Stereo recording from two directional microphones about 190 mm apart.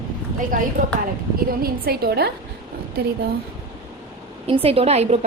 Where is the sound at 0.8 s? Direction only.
40° right (ahead or behind).